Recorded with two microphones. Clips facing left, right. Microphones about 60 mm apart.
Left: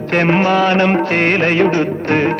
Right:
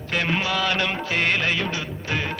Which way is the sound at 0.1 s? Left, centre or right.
Left.